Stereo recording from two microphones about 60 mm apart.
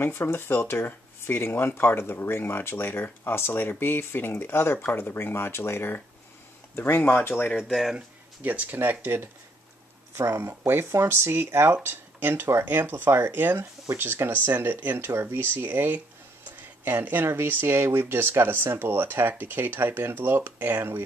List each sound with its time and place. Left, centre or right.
0.0 s speech: left
7.5 s speech: centre
8.4 s speech: right
8.7 s speech: right
10.1 s speech: right